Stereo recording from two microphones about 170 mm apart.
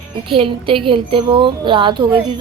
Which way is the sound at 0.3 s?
30° right (ahead or behind).